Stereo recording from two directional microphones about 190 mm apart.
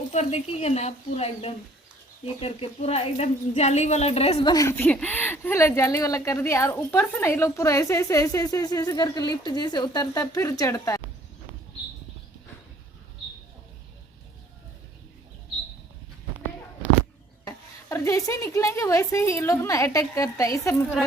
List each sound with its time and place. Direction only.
0.1 s speech: 35° left (ahead or behind)
4.5 s speech: 15° left (ahead or behind)
17.4 s speech: 15° left (ahead or behind)